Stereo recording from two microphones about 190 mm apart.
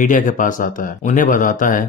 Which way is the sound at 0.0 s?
45° left (ahead or behind).